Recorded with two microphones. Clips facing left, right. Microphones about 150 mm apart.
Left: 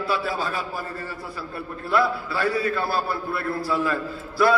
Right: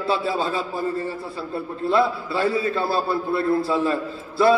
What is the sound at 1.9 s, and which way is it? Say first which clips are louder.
A man's voice: right 2 dB; 25° right (ahead or behind).